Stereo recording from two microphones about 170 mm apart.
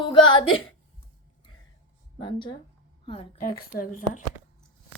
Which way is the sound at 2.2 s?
30° left (ahead or behind).